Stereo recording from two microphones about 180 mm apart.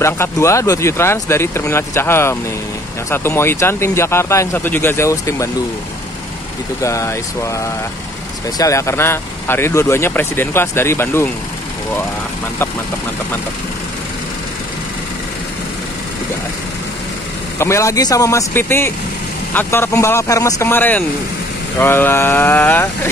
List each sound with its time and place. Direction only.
0.0 s speech: 15° left (ahead or behind)
6.8 s speech: 15° left (ahead or behind)
17.6 s speech: 15° left (ahead or behind)